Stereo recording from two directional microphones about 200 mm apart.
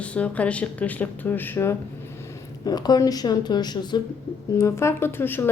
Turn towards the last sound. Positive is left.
turn(degrees=10)  # may be behind; listen again after turning